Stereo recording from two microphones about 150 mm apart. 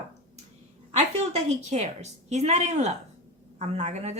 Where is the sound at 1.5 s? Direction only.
45° right (ahead or behind).